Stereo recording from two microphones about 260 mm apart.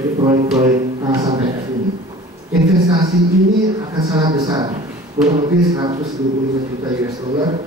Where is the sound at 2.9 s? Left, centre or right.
Centre.